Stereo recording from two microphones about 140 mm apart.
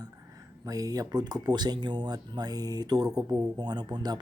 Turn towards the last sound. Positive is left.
turn(degrees=-30)  # may be behind; listen again after turning